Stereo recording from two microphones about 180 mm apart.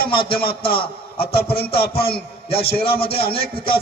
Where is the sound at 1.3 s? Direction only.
30° left (ahead or behind).